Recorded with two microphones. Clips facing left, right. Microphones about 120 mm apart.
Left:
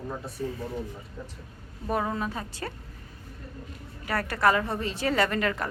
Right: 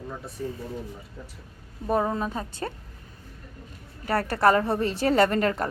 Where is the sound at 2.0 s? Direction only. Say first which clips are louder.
Right 3 dB; 20° right (ahead or behind).